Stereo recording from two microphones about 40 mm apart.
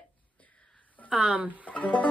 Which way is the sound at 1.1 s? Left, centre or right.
Right.